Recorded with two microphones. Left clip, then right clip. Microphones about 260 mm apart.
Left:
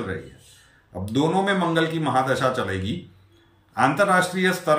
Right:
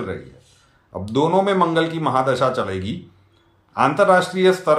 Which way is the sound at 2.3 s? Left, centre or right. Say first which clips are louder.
Right 3 dB; centre.